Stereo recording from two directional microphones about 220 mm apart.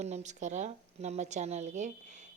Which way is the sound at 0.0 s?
30° right (ahead or behind).